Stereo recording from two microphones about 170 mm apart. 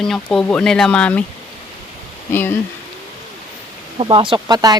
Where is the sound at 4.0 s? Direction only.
30° right (ahead or behind).